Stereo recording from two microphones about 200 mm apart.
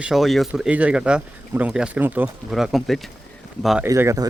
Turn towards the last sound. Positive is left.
turn(degrees=-15)  # may be behind; listen again after turning